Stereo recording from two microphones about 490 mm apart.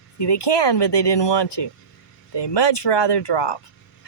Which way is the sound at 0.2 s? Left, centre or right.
Left.